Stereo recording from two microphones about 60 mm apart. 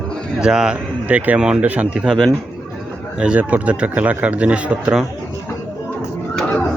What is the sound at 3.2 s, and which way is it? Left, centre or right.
A man's voice, right.